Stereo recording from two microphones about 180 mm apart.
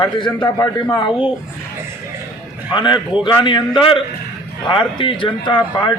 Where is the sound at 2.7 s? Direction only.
25° left (ahead or behind).